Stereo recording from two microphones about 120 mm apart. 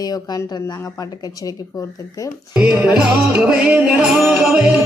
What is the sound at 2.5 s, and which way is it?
Music, 5° right (ahead or behind).